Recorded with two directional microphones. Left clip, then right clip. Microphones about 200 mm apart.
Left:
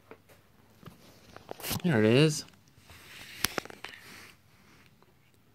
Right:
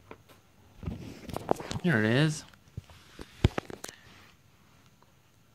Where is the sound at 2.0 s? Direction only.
10° left (ahead or behind).